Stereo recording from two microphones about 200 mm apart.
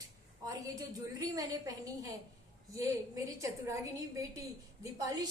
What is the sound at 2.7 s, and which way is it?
Speech, 15° right (ahead or behind).